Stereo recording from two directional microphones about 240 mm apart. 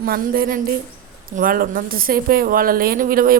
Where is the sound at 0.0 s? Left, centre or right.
Right.